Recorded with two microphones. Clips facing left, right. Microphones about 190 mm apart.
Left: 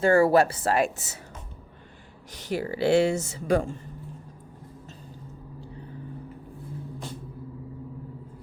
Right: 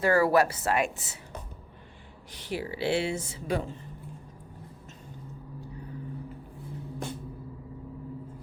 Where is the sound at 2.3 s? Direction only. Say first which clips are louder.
Left 4 dB; 45° left (ahead or behind).